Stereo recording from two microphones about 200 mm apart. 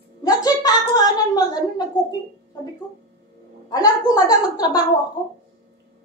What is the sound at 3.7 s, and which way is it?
A woman's voice, 20° left (ahead or behind).